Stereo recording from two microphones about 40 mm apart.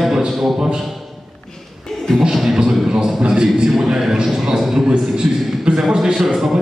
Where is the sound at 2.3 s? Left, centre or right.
Centre.